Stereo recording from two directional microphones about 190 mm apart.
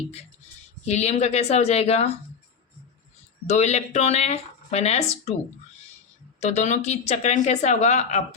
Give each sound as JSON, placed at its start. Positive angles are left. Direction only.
{"t": 0.9, "sound": "speech", "side_deg": 35}
{"t": 3.4, "sound": "speech", "side_deg": 35}
{"t": 6.4, "sound": "speech", "side_deg": 40}